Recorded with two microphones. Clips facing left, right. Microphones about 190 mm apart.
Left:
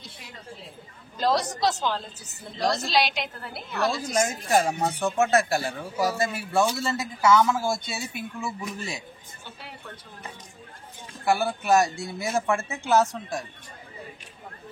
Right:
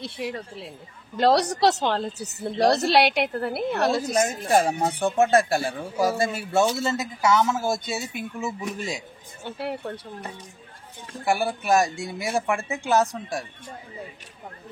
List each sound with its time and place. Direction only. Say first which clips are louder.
0.0 s a woman's voice: right 13 dB; 70° right (ahead or behind)
4.1 s speech: right 2 dB; 30° right (ahead or behind)
9.4 s a woman's voice: right 15 dB; 65° right (ahead or behind)
11.3 s speech: even; 10° right (ahead or behind)